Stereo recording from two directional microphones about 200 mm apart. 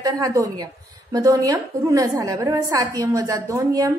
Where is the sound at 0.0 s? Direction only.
15° right (ahead or behind).